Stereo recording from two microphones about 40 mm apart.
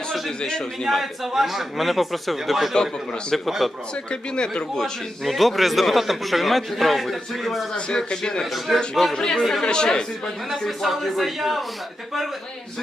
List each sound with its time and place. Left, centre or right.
0.1 s a man's voice: centre
0.9 s a man's voice: centre
2.7 s speech: centre
3.6 s a man's voice: centre
4.1 s a man's voice: left
5.2 s a man's voice: centre
7.9 s speech: centre
8.5 s a man's voice: centre
9.1 s a man's voice: centre
10.7 s a man's voice: centre